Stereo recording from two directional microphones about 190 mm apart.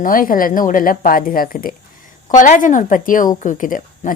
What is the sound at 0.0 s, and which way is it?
A woman's voice, 45° left (ahead or behind).